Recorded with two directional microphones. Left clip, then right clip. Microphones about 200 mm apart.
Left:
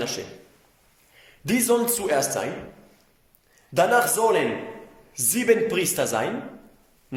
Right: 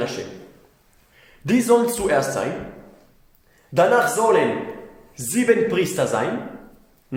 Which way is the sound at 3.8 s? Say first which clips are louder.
Right 3 dB; 45° left (ahead or behind).